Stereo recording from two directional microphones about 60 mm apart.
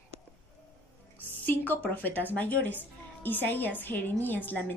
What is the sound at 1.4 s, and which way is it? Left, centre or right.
A woman's voice, left.